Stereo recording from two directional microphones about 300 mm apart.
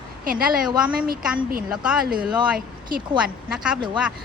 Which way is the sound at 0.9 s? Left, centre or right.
Right.